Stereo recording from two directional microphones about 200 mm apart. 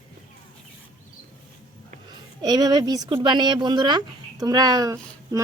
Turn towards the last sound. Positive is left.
turn(degrees=-15)  # may be behind; listen again after turning